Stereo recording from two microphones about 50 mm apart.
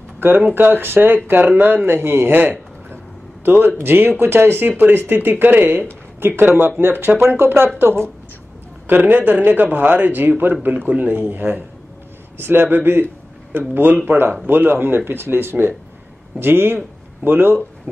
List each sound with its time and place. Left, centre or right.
0.2 s speech: right
8.8 s speech: right